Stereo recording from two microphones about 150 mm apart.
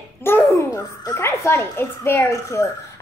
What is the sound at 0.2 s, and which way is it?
A child's voice, 15° left (ahead or behind).